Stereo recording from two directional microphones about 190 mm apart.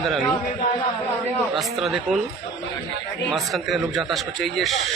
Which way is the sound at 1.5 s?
Centre (ahead or behind).